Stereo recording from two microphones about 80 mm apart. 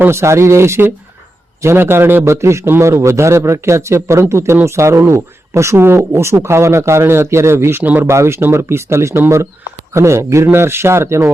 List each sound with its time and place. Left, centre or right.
0.0 s speech: right
8.1 s speech: right